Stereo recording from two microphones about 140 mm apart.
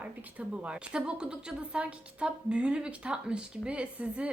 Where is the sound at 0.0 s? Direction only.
10° right (ahead or behind).